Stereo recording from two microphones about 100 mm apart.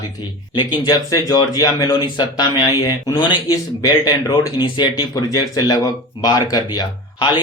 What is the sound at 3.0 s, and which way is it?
Speech, 40° left (ahead or behind).